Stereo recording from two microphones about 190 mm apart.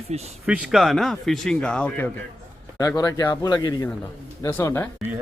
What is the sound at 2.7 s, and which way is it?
Speech, 20° left (ahead or behind).